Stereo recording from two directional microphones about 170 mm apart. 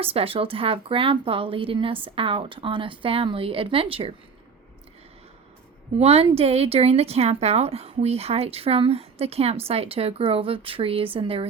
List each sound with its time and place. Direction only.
0.0 s speech: 35° right (ahead or behind)
6.0 s speech: 35° right (ahead or behind)